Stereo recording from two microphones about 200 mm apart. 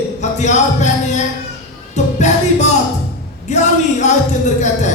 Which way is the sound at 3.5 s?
35° left (ahead or behind).